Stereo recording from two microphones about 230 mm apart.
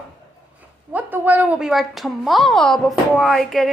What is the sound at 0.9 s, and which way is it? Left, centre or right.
A woman's voice, centre.